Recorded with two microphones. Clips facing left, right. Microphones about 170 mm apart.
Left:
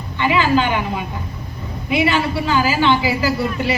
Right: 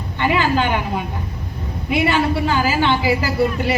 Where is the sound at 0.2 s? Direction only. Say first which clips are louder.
Left 1 dB; 50° right (ahead or behind).